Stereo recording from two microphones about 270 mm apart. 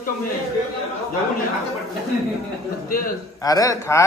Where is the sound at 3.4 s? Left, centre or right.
Centre.